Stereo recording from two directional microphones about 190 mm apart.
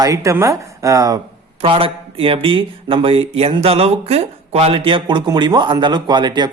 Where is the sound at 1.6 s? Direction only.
30° right (ahead or behind).